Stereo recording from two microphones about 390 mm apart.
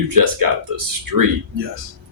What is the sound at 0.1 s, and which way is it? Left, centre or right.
Speech, right.